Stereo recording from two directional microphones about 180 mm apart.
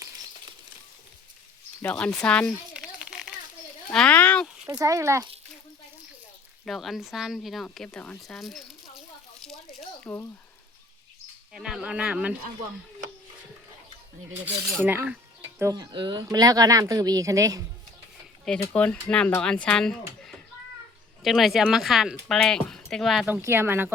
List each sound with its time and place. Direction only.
1.8 s speech: 5° left (ahead or behind)
2.7 s a sound: 5° right (ahead or behind)
3.8 s speech: 5° left (ahead or behind)
4.4 s a sound: 5° right (ahead or behind)
4.8 s speech: 15° right (ahead or behind)
6.7 s speech: centre (ahead or behind)
9.7 s a sound: 10° left (ahead or behind)
11.5 s speech: 5° right (ahead or behind)
14.3 s speech: 10° right (ahead or behind)
18.7 s speech: 5° left (ahead or behind); by 23.9 s 10° right (ahead or behind)